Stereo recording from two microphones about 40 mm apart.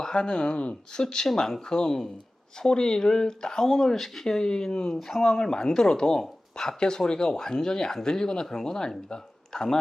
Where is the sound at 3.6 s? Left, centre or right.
Centre.